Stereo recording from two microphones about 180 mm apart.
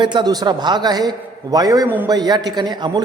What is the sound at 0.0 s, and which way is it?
A man's voice, 25° right (ahead or behind).